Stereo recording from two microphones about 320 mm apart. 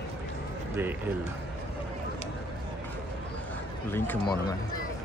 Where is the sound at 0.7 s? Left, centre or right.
Centre.